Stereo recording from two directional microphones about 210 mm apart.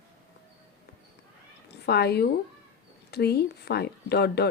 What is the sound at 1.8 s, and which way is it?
A woman's voice, 50° left (ahead or behind).